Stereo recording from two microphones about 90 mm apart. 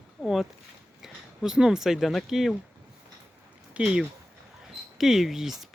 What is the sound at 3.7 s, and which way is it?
Speech, 10° right (ahead or behind).